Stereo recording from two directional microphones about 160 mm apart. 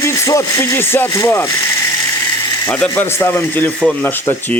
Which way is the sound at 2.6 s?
10° left (ahead or behind).